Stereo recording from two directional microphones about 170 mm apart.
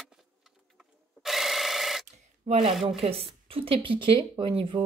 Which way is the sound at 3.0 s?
35° right (ahead or behind).